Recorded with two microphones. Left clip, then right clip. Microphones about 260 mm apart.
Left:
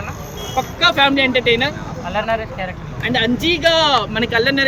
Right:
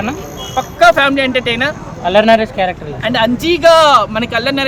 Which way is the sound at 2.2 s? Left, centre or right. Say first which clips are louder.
Right 10 dB; right.